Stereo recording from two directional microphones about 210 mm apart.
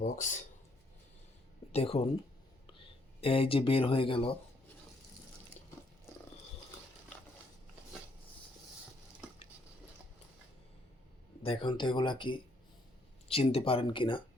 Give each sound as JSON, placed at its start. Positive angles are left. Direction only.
{"t": 0.0, "sound": "speech", "side_deg": 40}
{"t": 1.7, "sound": "speech", "side_deg": 30}
{"t": 11.4, "sound": "speech", "side_deg": 25}